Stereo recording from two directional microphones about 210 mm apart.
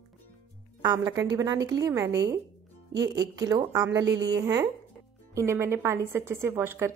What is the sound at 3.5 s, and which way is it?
Speech, 15° right (ahead or behind).